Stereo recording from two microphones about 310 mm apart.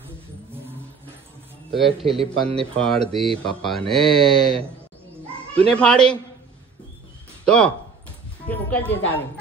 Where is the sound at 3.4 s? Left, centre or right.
Centre.